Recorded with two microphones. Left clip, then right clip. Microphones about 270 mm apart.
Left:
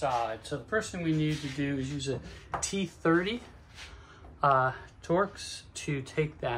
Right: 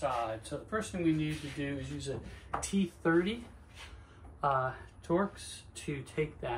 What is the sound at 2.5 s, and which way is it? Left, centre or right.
Speech, left.